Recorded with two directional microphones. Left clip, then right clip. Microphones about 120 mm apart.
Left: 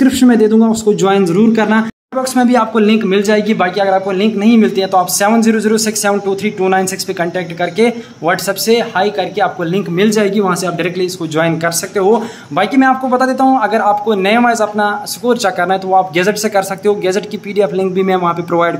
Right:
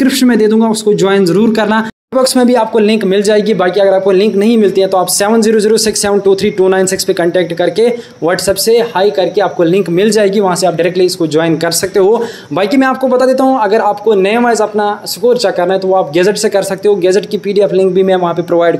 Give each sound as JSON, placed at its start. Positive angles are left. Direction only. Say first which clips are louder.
{"t": 0.0, "sound": "a man's voice", "louder": "right 1 dB", "side_deg": -45}
{"t": 4.0, "sound": "a man's voice", "louder": "right 5 dB", "side_deg": -35}
{"t": 9.7, "sound": "speech", "louder": "right 4 dB", "side_deg": -35}